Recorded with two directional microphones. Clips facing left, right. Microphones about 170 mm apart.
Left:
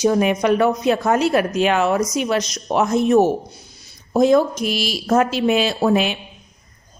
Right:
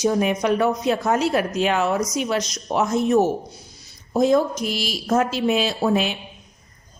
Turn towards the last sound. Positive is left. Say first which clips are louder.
# left 3 dB
turn(degrees=70)  # may be behind; listen again after turning